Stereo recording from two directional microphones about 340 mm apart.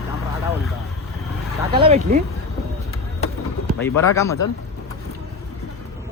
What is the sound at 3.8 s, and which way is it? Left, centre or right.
Speech, centre.